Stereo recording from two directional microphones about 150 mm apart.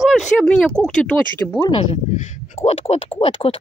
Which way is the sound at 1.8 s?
45° left (ahead or behind).